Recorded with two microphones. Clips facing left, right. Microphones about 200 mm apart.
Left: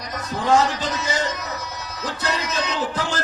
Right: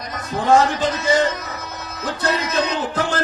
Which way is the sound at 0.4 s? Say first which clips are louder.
Right 3 dB; 55° right (ahead or behind).